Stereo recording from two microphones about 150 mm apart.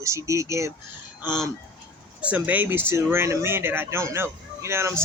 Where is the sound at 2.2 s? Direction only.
10° right (ahead or behind).